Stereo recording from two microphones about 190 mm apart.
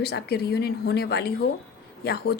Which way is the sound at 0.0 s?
55° left (ahead or behind).